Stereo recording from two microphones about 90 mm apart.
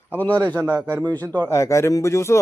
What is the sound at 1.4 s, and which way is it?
Speech, 30° left (ahead or behind).